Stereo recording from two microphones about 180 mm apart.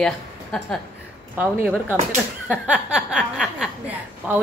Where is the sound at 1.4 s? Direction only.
10° right (ahead or behind).